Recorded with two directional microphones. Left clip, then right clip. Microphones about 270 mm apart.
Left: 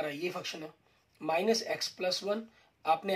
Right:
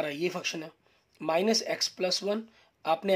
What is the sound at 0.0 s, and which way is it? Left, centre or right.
Speech, right.